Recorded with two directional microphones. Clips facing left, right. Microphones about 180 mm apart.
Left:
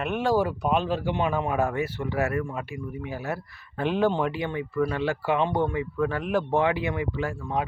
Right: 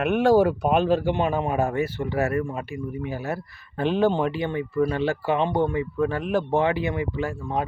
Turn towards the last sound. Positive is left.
turn(degrees=-30)  # may be behind; listen again after turning